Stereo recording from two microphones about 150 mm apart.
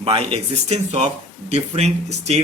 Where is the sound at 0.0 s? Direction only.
40° right (ahead or behind).